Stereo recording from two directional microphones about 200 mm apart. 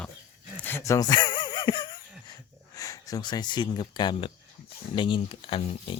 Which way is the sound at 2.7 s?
15° left (ahead or behind).